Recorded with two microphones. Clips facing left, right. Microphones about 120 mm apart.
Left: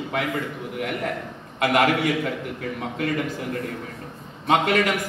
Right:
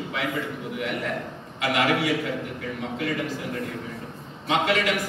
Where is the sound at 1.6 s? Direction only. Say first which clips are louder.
Left 5 dB; 50° left (ahead or behind).